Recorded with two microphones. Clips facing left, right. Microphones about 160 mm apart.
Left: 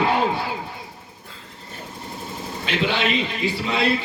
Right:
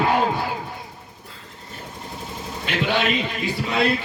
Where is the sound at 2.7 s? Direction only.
50° right (ahead or behind).